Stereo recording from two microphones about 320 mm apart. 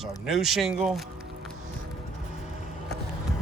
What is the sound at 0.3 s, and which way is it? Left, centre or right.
Speech, centre.